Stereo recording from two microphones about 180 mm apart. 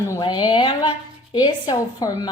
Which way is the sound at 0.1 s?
25° left (ahead or behind).